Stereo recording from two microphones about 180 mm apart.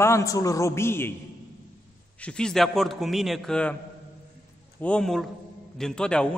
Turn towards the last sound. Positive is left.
turn(degrees=5)  # may be behind; listen again after turning